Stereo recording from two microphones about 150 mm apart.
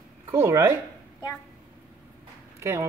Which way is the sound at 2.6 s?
20° right (ahead or behind).